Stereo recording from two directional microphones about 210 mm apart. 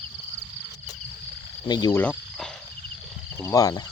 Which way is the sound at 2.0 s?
5° left (ahead or behind).